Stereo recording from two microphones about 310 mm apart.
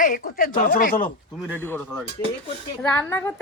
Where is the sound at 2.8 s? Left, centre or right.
Centre.